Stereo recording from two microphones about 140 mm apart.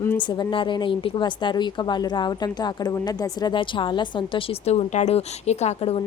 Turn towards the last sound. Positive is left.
turn(degrees=50)  # may be behind; listen again after turning